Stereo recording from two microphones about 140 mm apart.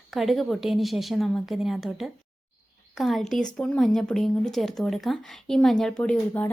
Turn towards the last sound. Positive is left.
turn(degrees=10)  # may be behind; listen again after turning